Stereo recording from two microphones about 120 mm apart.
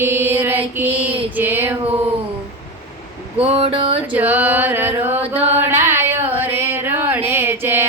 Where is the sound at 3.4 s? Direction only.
55° right (ahead or behind).